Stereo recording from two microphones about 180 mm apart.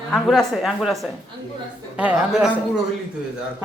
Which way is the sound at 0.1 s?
Centre (ahead or behind).